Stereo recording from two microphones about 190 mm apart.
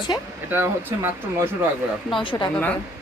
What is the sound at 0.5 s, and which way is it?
Speech, 10° right (ahead or behind).